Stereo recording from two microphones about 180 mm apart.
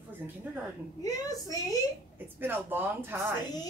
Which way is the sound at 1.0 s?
20° left (ahead or behind).